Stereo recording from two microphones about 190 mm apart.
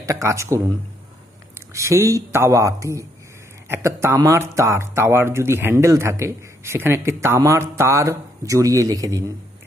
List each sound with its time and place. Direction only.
0.0 s speech: 15° right (ahead or behind)